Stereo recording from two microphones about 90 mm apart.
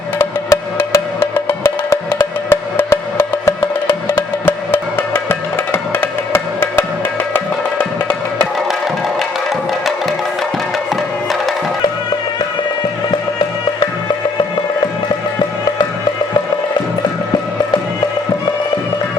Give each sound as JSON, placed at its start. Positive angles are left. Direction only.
{"t": 0.2, "sound": "music", "side_deg": 30}